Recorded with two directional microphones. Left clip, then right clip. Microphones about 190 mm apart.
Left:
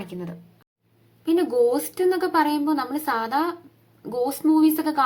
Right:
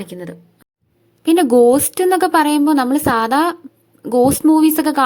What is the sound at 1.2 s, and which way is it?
A woman's voice, 50° right (ahead or behind).